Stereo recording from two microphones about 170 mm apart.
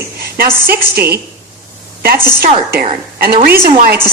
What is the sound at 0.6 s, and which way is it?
Speech, 65° right (ahead or behind).